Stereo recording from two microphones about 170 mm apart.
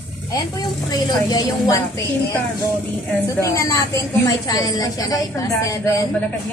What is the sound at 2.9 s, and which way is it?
A woman's voice, 15° left (ahead or behind).